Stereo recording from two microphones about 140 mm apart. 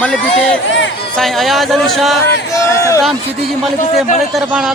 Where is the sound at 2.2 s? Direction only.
20° left (ahead or behind).